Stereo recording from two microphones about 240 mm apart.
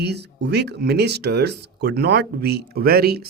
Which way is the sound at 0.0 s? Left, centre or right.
Right.